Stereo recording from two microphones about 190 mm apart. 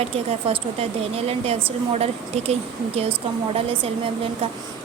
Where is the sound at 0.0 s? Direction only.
30° right (ahead or behind).